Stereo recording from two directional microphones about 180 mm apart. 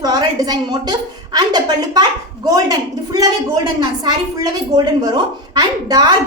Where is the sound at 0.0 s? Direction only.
20° right (ahead or behind).